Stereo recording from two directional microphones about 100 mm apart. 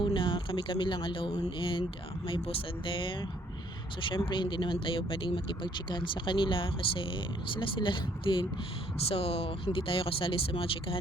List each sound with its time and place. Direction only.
0.0 s speech: 55° left (ahead or behind)
9.0 s speech: 75° left (ahead or behind)